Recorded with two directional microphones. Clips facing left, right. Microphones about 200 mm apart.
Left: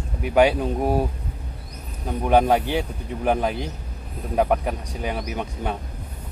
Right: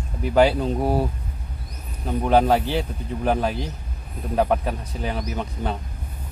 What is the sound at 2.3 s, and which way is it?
Speech, 15° left (ahead or behind).